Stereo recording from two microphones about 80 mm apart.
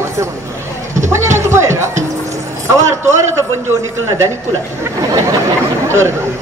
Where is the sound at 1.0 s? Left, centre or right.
Right.